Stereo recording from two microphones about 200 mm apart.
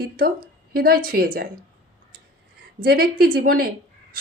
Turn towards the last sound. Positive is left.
turn(degrees=-50)  # may be behind; listen again after turning